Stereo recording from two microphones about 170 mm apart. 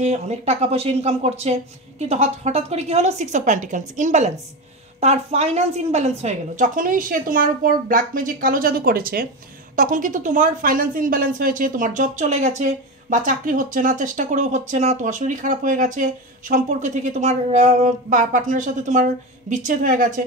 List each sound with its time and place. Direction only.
0.0 s speech: 40° right (ahead or behind)